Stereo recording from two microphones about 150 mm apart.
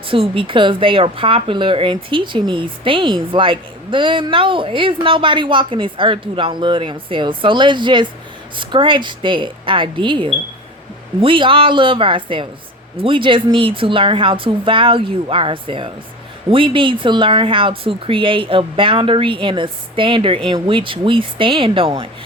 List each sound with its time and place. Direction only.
0.1 s speech: 35° right (ahead or behind)